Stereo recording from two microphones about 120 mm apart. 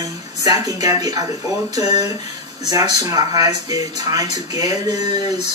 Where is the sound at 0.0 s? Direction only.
30° right (ahead or behind).